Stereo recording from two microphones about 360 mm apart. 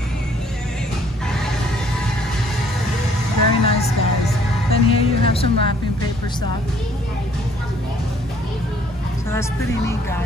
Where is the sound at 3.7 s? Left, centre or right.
Centre.